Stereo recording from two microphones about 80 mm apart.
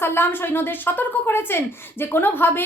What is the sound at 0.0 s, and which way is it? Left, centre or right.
A woman's voice, left.